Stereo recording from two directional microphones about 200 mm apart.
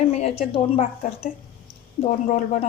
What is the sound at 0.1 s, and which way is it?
A woman's voice, 30° left (ahead or behind).